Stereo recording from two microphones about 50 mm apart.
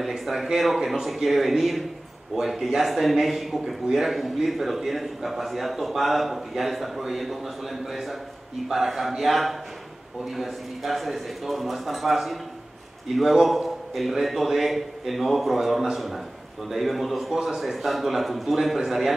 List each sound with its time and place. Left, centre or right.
0.2 s a man's voice: centre